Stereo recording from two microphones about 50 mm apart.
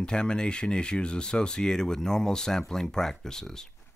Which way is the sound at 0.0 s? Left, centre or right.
Centre.